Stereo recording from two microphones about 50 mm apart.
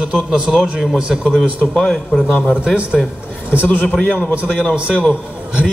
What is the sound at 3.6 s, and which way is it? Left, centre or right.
A man's voice, left.